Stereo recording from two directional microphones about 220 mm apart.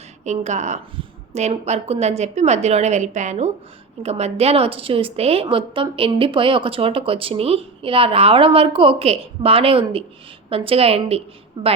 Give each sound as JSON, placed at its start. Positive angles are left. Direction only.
{"t": 0.3, "sound": "a woman's voice", "side_deg": -30}